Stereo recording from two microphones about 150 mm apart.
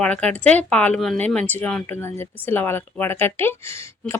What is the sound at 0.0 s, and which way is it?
Speech, 5° left (ahead or behind).